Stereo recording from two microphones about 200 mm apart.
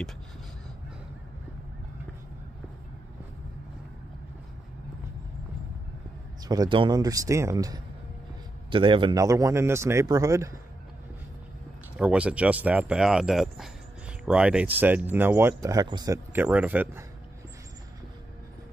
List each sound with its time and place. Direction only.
6.4 s speech: 20° right (ahead or behind)
12.0 s speech: 5° right (ahead or behind)